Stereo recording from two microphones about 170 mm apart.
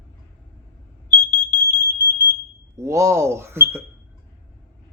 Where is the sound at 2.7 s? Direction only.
15° right (ahead or behind).